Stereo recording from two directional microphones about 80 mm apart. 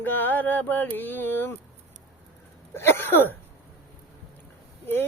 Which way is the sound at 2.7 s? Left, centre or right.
Left.